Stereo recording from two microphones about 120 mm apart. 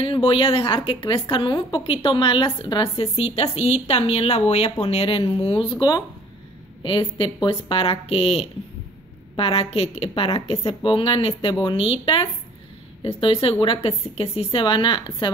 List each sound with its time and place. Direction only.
0.0 s a woman's voice: 50° left (ahead or behind)